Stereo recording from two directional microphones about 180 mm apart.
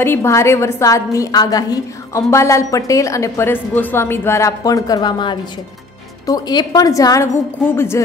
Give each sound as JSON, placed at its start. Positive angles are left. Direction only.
{"t": 0.0, "sound": "a woman's voice", "side_deg": 15}